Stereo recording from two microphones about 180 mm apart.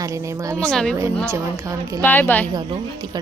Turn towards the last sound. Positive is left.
turn(degrees=-25)  # may be behind; listen again after turning